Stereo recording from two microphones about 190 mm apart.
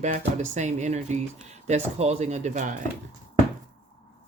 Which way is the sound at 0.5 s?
40° right (ahead or behind).